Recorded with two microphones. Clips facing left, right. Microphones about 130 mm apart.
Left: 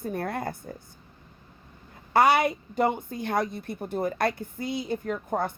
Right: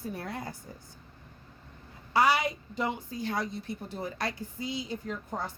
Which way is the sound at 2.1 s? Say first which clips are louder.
Left 5 dB; 55° left (ahead or behind).